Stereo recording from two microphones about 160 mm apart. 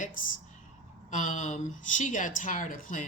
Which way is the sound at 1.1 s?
50° left (ahead or behind).